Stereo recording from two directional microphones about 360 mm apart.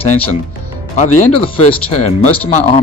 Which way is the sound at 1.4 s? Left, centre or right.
Centre.